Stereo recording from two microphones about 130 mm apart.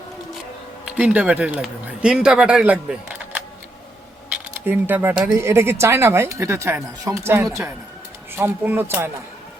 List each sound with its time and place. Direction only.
0.9 s speech: 10° right (ahead or behind)
4.6 s speech: 15° right (ahead or behind)
7.4 s a woman's voice: 5° right (ahead or behind)
8.4 s speech: 15° right (ahead or behind)